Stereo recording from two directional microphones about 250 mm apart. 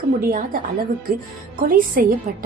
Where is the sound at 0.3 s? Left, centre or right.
Right.